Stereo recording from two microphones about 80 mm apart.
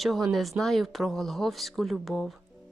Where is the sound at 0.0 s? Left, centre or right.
Centre.